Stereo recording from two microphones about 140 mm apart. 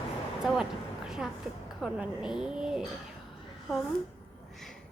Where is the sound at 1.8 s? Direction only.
5° right (ahead or behind).